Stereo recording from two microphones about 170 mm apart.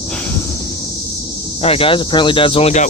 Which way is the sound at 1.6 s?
35° left (ahead or behind).